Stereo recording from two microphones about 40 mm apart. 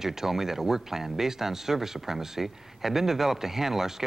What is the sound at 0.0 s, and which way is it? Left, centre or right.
Speech, centre.